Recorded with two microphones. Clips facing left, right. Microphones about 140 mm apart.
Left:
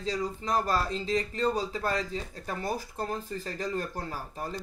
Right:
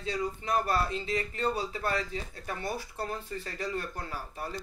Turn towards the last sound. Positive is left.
turn(degrees=35)  # may be behind; listen again after turning